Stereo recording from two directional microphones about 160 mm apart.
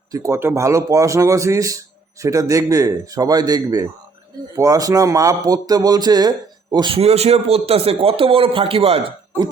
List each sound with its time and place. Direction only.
0.1 s a man's voice: 20° right (ahead or behind); by 9.1 s 35° right (ahead or behind)